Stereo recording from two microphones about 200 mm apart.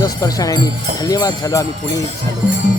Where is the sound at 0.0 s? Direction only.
20° left (ahead or behind).